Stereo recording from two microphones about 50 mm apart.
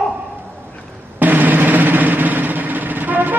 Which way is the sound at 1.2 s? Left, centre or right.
Right.